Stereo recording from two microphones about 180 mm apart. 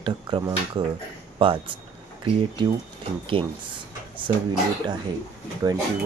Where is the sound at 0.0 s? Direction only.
25° right (ahead or behind).